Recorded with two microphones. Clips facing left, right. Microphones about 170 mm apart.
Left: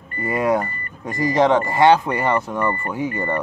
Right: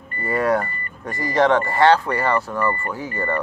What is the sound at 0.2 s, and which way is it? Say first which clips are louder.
Speech: left 1 dB; 15° left (ahead or behind).